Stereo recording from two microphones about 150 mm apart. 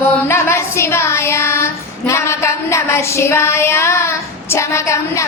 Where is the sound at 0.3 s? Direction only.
15° left (ahead or behind).